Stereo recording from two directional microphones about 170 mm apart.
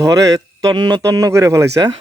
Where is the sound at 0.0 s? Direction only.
20° right (ahead or behind).